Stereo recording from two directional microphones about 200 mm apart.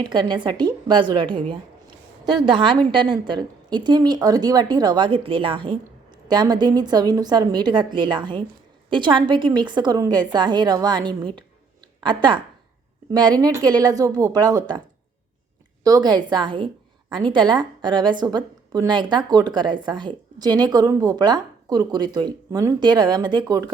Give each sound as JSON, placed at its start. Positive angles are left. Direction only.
{"t": 0.0, "sound": "a woman's voice", "side_deg": -20}
{"t": 15.8, "sound": "a woman's voice", "side_deg": -20}